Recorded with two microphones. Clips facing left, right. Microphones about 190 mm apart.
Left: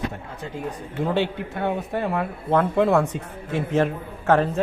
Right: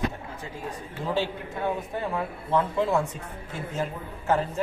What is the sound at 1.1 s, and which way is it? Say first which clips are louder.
A man's voice: left 2 dB; 65° left (ahead or behind).